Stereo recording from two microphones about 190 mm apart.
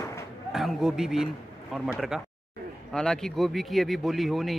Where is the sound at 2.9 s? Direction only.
5° left (ahead or behind).